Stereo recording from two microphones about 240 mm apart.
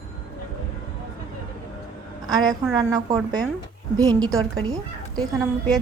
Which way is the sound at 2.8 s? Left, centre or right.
Centre.